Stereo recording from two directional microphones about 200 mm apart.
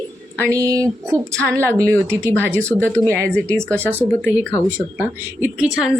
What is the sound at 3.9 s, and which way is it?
A woman's voice, 5° right (ahead or behind).